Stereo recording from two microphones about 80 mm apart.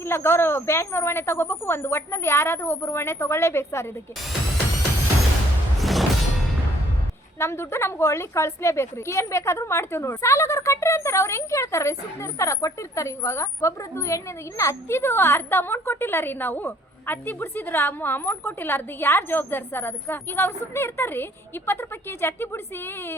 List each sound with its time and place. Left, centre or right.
0.0 s speech: left
5.8 s music: centre
7.3 s a woman's voice: left